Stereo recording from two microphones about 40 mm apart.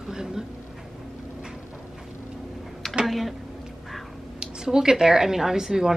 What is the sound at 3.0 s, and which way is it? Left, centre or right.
Speech, centre.